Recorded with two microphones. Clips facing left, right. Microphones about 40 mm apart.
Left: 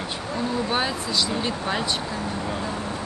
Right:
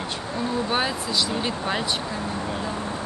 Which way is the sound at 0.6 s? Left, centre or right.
Centre.